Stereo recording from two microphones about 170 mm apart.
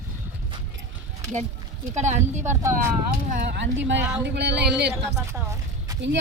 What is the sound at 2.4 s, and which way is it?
Speech, 15° right (ahead or behind).